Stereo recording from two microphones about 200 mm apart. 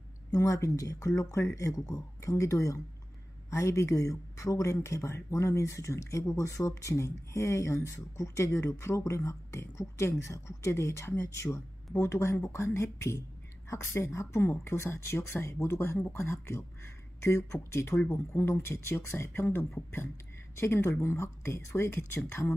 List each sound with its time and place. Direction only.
0.3 s speech: 15° left (ahead or behind)